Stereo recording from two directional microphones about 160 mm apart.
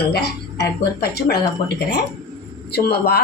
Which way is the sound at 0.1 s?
90° left.